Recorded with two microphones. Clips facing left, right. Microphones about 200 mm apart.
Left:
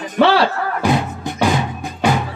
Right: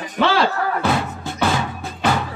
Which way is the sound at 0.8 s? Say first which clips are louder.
Left 3 dB; 15° left (ahead or behind).